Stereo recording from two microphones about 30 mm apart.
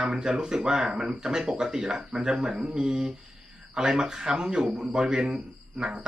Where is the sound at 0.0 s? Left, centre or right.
Centre.